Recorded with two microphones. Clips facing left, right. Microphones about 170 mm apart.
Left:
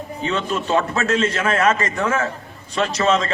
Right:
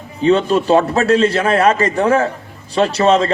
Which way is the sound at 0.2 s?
35° right (ahead or behind).